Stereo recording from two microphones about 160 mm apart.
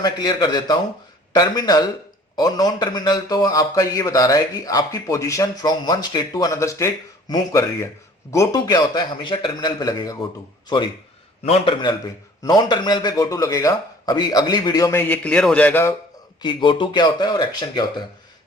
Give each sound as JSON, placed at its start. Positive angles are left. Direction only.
{"t": 0.0, "sound": "a man's voice", "side_deg": 25}
{"t": 16.4, "sound": "a man's voice", "side_deg": 30}